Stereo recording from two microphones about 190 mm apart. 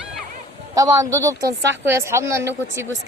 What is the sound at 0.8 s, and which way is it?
Speech, 15° right (ahead or behind).